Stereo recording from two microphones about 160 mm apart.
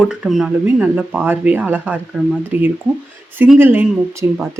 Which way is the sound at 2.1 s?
Centre (ahead or behind).